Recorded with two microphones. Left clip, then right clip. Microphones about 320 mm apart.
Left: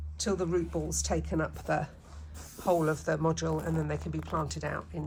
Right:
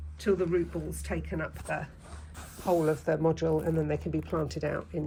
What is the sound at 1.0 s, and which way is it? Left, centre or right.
Speech, centre.